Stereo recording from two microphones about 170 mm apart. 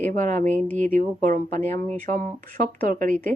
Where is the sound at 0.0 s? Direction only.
45° right (ahead or behind).